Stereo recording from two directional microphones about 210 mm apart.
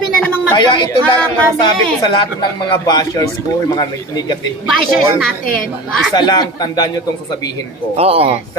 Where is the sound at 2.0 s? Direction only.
20° left (ahead or behind).